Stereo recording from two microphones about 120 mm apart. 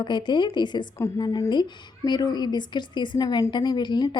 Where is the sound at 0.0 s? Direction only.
40° left (ahead or behind).